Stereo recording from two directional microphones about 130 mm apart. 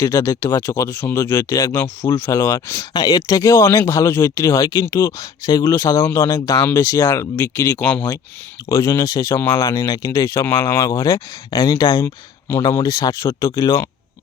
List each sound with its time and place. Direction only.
0.0 s speech: 20° left (ahead or behind)
8.7 s speech: 25° left (ahead or behind)